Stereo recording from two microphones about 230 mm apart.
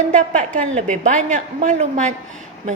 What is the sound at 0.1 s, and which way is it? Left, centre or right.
A woman's voice, right.